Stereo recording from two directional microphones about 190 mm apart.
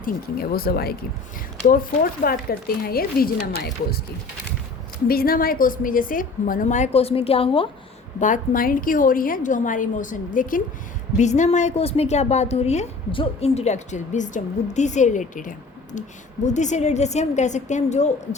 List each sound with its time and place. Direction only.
0.0 s a woman's voice: 50° left (ahead or behind)
5.0 s a woman's voice: 50° left (ahead or behind); by 7.7 s 30° left (ahead or behind)
8.2 s a woman's voice: 45° left (ahead or behind)